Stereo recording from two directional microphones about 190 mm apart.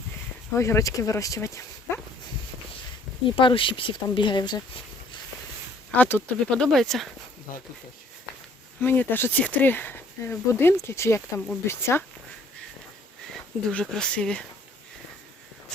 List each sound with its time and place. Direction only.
0.5 s speech: 15° left (ahead or behind)
3.3 s speech: 25° left (ahead or behind)
6.0 s speech: 10° left (ahead or behind)
7.5 s speech: 45° left (ahead or behind)
8.8 s speech: 10° left (ahead or behind)
13.7 s speech: 5° left (ahead or behind)